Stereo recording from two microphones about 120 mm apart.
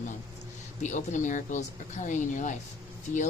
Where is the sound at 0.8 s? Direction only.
90° left.